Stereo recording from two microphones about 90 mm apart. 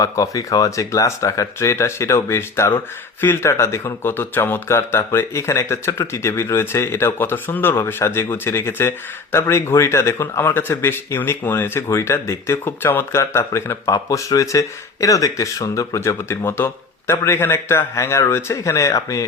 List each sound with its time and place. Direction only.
0.0 s speech: 40° left (ahead or behind)